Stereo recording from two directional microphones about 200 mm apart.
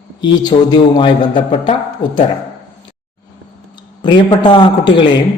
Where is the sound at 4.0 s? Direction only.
25° left (ahead or behind).